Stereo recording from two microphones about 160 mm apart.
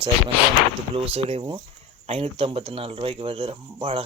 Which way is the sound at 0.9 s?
40° right (ahead or behind).